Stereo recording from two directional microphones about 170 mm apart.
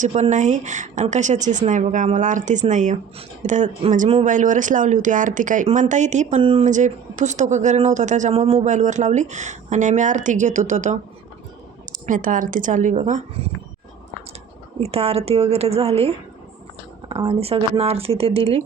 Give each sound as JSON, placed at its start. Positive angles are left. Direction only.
{"t": 0.0, "sound": "a woman's voice", "side_deg": -45}
{"t": 6.4, "sound": "speech", "side_deg": -35}
{"t": 6.7, "sound": "a woman's voice", "side_deg": -45}
{"t": 14.8, "sound": "speech", "side_deg": -35}